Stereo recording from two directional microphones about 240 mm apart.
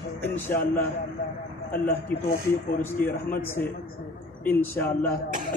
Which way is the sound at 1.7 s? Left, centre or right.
Left.